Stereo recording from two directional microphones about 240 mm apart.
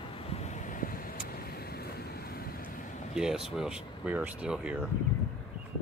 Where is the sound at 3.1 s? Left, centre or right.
Centre.